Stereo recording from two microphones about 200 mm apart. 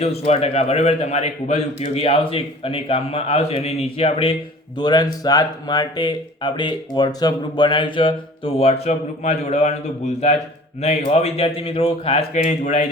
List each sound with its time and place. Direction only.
0.0 s a man's voice: 30° left (ahead or behind)